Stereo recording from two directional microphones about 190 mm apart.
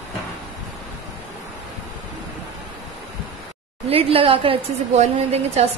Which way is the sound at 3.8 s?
30° right (ahead or behind).